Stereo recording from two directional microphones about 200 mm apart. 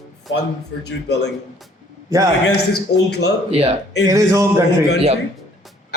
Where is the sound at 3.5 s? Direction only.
30° right (ahead or behind).